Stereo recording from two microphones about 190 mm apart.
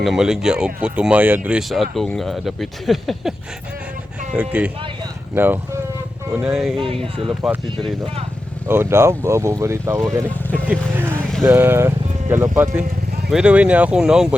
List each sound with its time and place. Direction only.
0.0 s speech: centre (ahead or behind)
4.4 s speech: 10° right (ahead or behind)
6.7 s speech: 30° right (ahead or behind)
7.3 s speech: 5° right (ahead or behind)
8.6 s speech: 10° right (ahead or behind)